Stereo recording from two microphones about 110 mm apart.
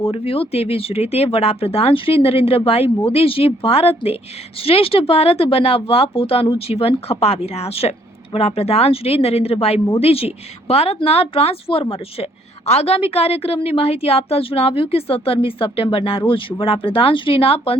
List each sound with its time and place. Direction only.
0.1 s speech: 60° left (ahead or behind)